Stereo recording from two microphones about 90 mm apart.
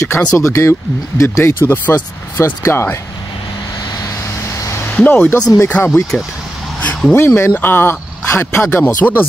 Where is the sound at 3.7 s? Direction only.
45° left (ahead or behind).